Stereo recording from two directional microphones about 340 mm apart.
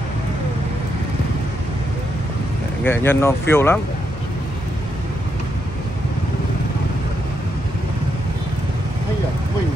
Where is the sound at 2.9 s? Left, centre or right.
Centre.